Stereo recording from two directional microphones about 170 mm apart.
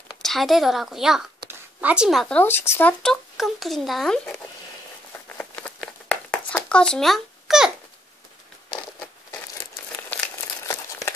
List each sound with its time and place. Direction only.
0.1 s a woman's voice: centre (ahead or behind)
5.4 s a sound: 5° left (ahead or behind)
10.7 s crumpling: 20° left (ahead or behind)